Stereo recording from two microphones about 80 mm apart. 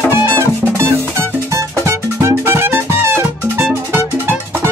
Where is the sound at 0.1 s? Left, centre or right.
Right.